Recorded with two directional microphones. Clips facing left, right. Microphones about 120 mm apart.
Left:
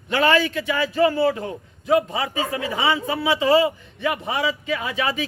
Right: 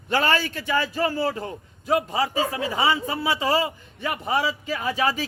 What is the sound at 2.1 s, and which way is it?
Speech, 30° right (ahead or behind).